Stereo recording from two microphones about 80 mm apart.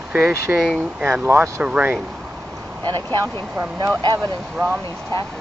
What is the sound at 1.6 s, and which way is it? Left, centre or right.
Speech, centre.